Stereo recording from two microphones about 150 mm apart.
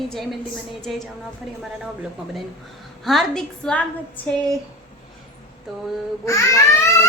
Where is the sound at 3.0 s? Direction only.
Centre (ahead or behind).